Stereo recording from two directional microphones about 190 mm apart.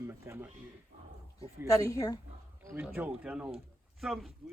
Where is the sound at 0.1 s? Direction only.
15° right (ahead or behind).